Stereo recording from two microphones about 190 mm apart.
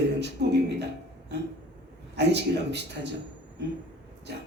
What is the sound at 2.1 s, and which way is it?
Speech, 65° right (ahead or behind).